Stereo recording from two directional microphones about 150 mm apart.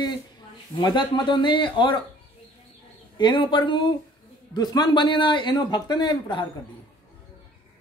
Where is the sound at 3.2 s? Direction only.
30° left (ahead or behind).